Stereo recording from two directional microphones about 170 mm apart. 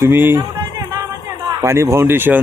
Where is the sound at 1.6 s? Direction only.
15° right (ahead or behind).